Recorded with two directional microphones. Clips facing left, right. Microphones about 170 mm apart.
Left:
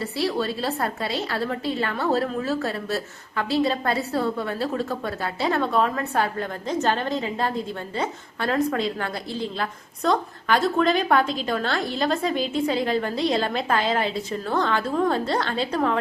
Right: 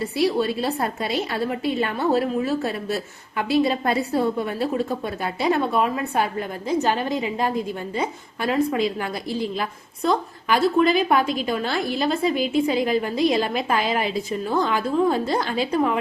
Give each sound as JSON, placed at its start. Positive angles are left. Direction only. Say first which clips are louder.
{"t": 0.0, "sound": "a woman's voice", "louder": "right 4 dB", "side_deg": -15}